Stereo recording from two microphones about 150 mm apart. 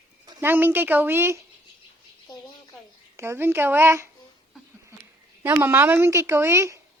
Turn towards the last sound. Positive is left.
turn(degrees=-20)  # may be behind; listen again after turning